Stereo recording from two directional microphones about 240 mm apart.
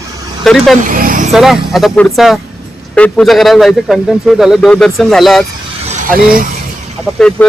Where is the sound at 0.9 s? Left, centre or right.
Right.